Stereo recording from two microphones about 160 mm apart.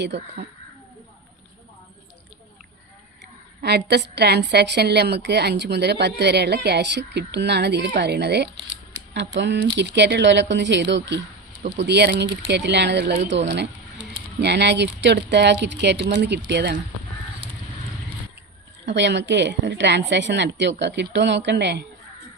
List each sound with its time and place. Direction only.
3.6 s a woman's voice: 90° right
13.1 s speech: 50° right (ahead or behind)
13.6 s a woman's voice: 90° right
18.9 s a woman's voice: 90° right